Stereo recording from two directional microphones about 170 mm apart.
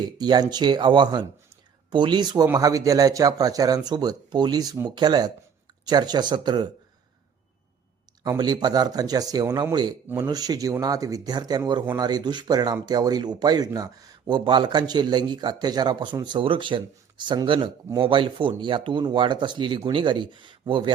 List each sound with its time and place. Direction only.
0.2 s speech: 25° right (ahead or behind)
8.2 s speech: 25° right (ahead or behind)